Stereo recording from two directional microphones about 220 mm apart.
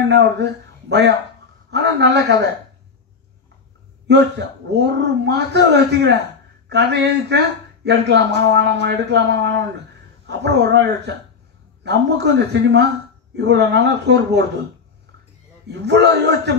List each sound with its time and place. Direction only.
0.1 s a man's voice: 50° right (ahead or behind)
4.1 s a man's voice: 50° right (ahead or behind)
15.7 s a man's voice: 50° right (ahead or behind)